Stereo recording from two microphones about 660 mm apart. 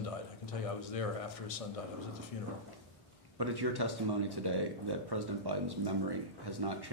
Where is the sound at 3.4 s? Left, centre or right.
Right.